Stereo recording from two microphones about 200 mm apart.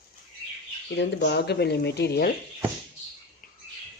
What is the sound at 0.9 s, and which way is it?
Speech, 60° left (ahead or behind).